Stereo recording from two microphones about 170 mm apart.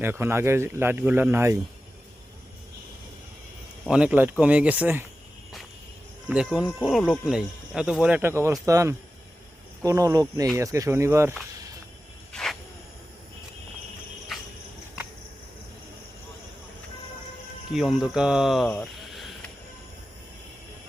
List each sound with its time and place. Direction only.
0.0 s speech: 15° right (ahead or behind)
3.8 s speech: 5° right (ahead or behind)
6.2 s speech: 5° right (ahead or behind)
12.3 s snake: centre (ahead or behind)
14.3 s cricket: centre (ahead or behind)
17.7 s speech: centre (ahead or behind)